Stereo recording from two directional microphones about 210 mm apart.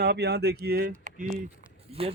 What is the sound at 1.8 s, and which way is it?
Speech, 25° right (ahead or behind).